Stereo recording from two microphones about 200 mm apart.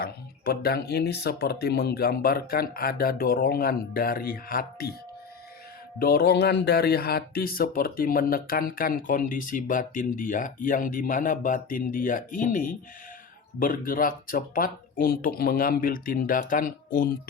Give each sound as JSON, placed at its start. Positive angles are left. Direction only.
{"t": 0.0, "sound": "speech", "side_deg": 50}
{"t": 6.0, "sound": "speech", "side_deg": 50}